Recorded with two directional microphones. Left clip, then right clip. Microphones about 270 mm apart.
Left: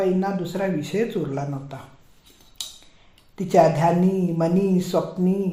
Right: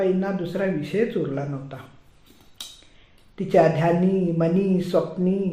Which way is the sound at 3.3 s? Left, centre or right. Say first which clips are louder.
Left 1 dB; left.